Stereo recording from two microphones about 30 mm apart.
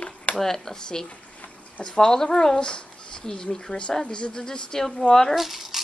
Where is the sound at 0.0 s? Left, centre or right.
Left.